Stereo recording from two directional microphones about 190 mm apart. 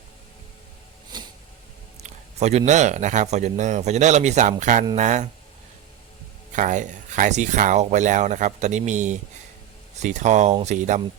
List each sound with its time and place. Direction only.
1.1 s vehicle: 20° right (ahead or behind)
2.0 s speech: 35° right (ahead or behind)
6.5 s speech: 40° right (ahead or behind)